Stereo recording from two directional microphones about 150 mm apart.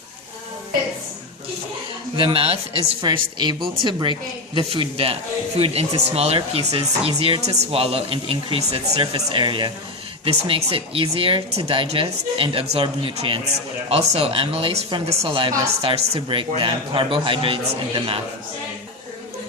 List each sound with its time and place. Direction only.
2.1 s speech: 35° right (ahead or behind)